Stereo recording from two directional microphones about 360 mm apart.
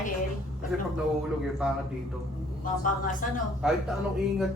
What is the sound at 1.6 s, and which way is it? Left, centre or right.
Speech, centre.